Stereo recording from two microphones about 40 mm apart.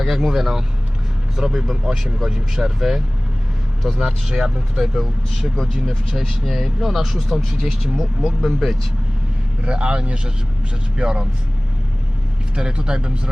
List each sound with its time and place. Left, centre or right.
0.0 s speech: centre
9.6 s speech: right
12.5 s speech: right